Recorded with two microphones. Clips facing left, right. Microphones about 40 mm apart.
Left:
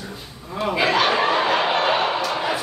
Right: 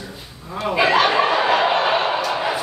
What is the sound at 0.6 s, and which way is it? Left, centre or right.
Chuckle, centre.